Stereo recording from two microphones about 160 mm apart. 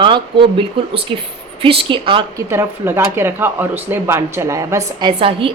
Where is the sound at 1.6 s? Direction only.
35° right (ahead or behind).